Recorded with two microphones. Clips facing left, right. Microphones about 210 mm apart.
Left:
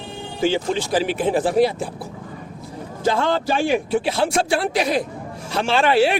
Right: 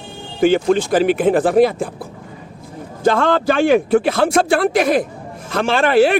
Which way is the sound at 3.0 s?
55° right (ahead or behind).